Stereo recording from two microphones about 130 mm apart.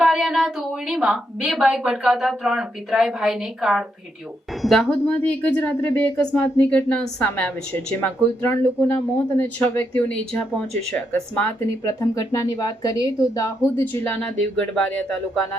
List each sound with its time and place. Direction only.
0.0 s a woman's voice: centre (ahead or behind)
11.8 s speech: 25° left (ahead or behind)
13.8 s a woman's voice: 15° left (ahead or behind)